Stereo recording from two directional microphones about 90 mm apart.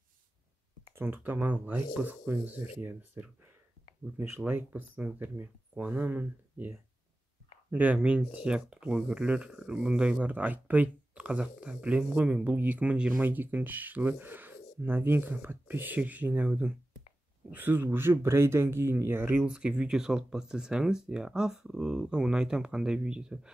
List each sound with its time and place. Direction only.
0.9 s speech: 25° right (ahead or behind)
4.5 s speech: 20° right (ahead or behind)
7.7 s speech: 15° right (ahead or behind)
19.4 s speech: 10° right (ahead or behind)